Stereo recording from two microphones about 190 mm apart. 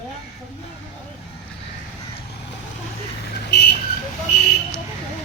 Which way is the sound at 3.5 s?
60° left (ahead or behind).